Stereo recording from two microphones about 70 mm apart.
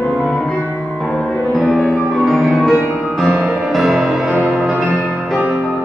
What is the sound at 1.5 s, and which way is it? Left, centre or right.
Music, centre.